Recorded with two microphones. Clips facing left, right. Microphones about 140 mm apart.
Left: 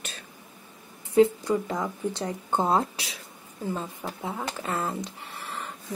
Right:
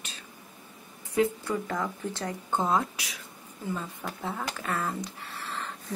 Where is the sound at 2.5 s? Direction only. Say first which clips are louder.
Left 3 dB; 35° left (ahead or behind).